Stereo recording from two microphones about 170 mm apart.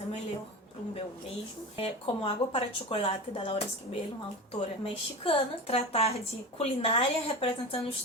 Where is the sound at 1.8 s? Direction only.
35° left (ahead or behind).